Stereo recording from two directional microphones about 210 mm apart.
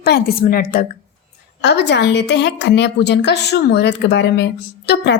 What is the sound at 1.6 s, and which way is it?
A woman's voice, 55° left (ahead or behind).